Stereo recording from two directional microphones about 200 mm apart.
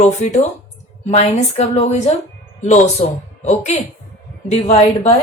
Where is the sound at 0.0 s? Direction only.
35° left (ahead or behind).